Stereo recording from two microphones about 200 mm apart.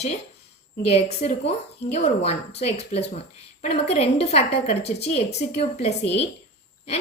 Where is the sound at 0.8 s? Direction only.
30° left (ahead or behind).